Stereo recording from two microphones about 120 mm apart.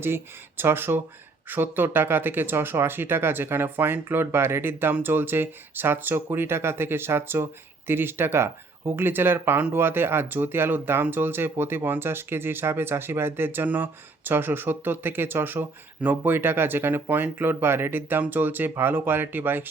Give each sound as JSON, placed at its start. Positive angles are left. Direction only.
{"t": 0.0, "sound": "speech", "side_deg": -20}